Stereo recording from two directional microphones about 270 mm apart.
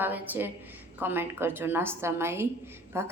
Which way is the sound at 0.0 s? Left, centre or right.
Centre.